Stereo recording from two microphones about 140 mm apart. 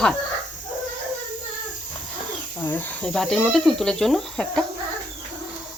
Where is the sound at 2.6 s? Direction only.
15° left (ahead or behind).